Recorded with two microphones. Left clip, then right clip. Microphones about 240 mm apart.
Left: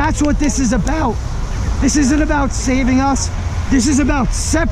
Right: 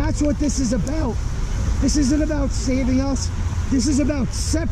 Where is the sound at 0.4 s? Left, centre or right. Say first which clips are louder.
Left 5 dB; centre.